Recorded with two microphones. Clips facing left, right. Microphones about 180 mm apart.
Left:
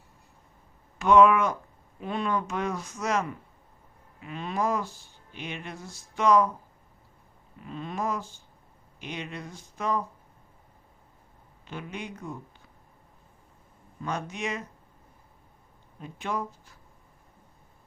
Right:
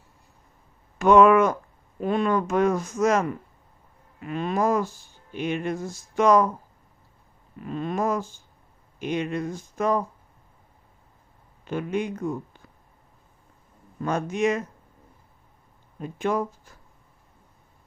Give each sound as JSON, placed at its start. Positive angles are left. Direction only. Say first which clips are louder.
{"t": 0.9, "sound": "speech", "louder": "right 4 dB", "side_deg": -45}
{"t": 7.6, "sound": "speech", "louder": "right 6 dB", "side_deg": -55}
{"t": 11.6, "sound": "speech", "louder": "right 11 dB", "side_deg": -50}
{"t": 14.0, "sound": "speech", "louder": "right 9 dB", "side_deg": -45}
{"t": 16.0, "sound": "speech", "louder": "right 7 dB", "side_deg": -50}